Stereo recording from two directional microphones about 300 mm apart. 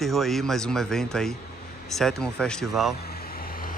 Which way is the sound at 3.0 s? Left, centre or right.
Left.